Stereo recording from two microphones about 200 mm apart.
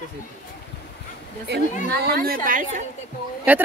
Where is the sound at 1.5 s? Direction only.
55° right (ahead or behind).